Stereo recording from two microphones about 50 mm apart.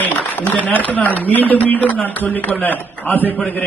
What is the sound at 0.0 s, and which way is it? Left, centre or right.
A man's voice, left.